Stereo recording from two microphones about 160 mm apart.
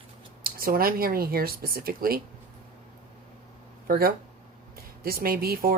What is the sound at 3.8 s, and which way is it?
Speech, 70° right (ahead or behind).